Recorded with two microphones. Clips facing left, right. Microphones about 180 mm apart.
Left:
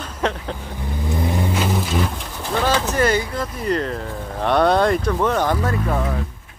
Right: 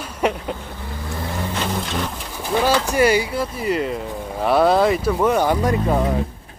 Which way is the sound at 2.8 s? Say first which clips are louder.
Right 2 dB; 10° right (ahead or behind).